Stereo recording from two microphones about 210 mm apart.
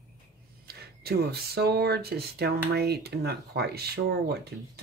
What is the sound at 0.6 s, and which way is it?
Speech, 50° right (ahead or behind).